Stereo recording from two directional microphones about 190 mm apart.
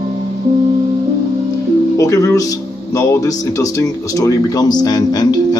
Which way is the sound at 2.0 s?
15° left (ahead or behind).